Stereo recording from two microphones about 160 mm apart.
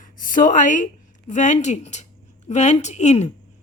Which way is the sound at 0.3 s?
55° left (ahead or behind).